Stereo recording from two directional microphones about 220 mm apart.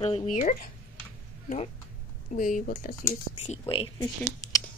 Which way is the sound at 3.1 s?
25° left (ahead or behind).